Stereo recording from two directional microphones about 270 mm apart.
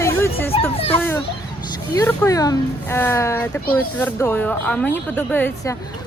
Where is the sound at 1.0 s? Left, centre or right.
Centre.